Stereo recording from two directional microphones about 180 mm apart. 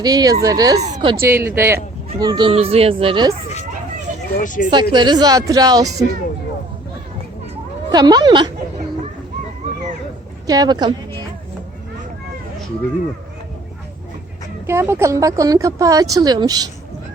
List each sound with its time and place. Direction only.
0.0 s speech: 20° right (ahead or behind)
0.8 s a woman's voice: 40° right (ahead or behind)
1.2 s speech: 15° right (ahead or behind)
4.4 s speech: 50° left (ahead or behind)
4.7 s speech: 25° right (ahead or behind)
7.9 s speech: 20° right (ahead or behind)
10.4 s speech: 20° right (ahead or behind)
14.7 s speech: 15° right (ahead or behind)